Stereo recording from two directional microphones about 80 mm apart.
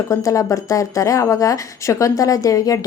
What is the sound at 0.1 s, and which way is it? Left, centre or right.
Speech, left.